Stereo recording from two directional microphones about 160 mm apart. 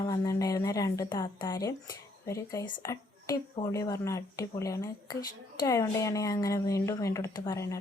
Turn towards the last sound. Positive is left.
turn(degrees=20)  # may be behind; listen again after turning